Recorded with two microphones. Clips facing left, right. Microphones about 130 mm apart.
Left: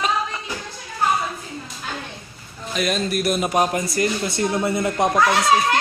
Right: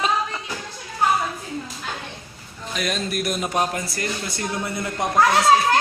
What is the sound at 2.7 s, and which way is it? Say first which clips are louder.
Speech: left 4 dB; centre (ahead or behind).